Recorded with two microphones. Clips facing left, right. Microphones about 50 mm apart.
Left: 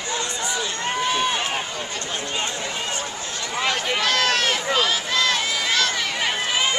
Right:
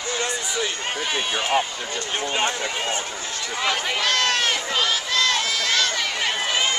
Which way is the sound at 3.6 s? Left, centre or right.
Centre.